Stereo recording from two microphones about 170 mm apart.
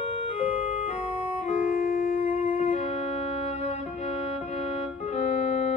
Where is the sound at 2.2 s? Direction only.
35° left (ahead or behind).